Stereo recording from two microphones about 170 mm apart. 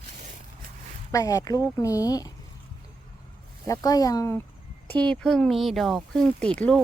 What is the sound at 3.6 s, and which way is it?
Speech, 20° left (ahead or behind).